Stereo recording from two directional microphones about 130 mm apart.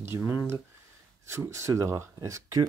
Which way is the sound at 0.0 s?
15° right (ahead or behind).